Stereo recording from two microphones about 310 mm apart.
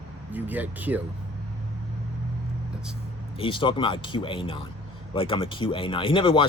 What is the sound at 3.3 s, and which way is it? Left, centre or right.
Speech, centre.